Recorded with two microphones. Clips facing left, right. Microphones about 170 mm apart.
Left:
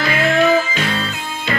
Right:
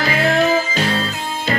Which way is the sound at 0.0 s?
35° right (ahead or behind).